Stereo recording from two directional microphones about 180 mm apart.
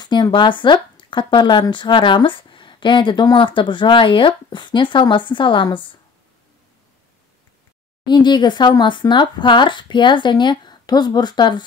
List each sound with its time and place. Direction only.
0.0 s speech: 25° left (ahead or behind)
8.0 s speech: 25° left (ahead or behind)